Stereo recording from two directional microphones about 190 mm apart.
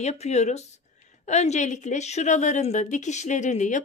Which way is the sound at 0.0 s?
35° left (ahead or behind).